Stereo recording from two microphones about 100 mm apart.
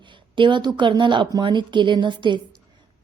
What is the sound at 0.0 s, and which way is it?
A woman's voice, 55° right (ahead or behind).